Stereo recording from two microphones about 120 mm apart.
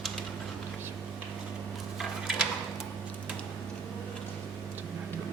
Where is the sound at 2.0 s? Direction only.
Centre (ahead or behind).